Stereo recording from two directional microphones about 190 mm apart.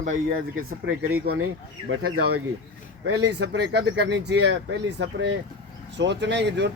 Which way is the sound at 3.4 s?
65° right (ahead or behind).